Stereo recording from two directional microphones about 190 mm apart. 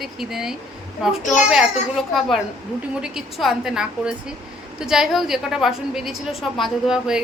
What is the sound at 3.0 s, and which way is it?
A woman's voice, centre (ahead or behind).